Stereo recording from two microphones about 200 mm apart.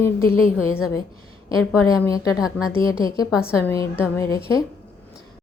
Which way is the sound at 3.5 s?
15° left (ahead or behind).